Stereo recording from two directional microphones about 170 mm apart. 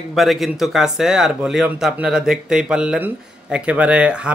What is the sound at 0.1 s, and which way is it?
Speech, centre (ahead or behind).